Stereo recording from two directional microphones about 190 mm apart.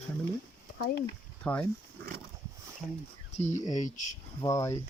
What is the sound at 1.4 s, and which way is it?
Speech, 5° left (ahead or behind).